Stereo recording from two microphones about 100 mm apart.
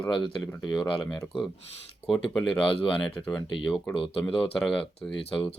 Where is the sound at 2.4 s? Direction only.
65° left (ahead or behind).